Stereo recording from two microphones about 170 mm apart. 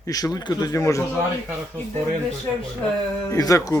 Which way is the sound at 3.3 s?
20° left (ahead or behind).